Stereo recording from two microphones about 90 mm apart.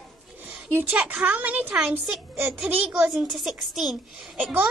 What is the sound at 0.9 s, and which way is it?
A woman's voice, 15° right (ahead or behind).